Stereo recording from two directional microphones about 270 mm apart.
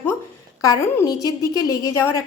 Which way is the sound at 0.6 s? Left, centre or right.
Centre.